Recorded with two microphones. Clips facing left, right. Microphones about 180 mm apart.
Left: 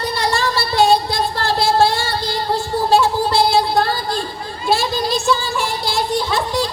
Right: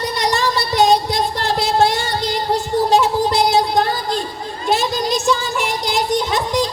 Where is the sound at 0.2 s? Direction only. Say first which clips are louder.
Right 1 dB; 20° right (ahead or behind).